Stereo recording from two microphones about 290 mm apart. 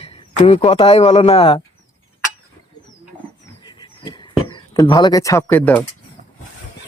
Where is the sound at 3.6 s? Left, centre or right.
Centre.